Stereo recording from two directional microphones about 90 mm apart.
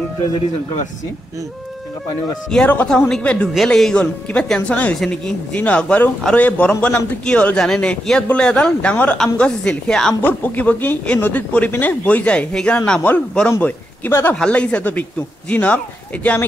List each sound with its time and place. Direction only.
2.5 s speech: 10° left (ahead or behind)
10.2 s a man's voice: 20° left (ahead or behind)
14.3 s speech: 10° left (ahead or behind)